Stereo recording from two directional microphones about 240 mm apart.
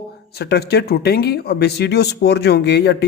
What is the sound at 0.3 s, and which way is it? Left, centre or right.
Speech, left.